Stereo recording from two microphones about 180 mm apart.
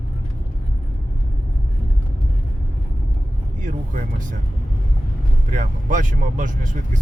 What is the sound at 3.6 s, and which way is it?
Vehicle, 45° right (ahead or behind).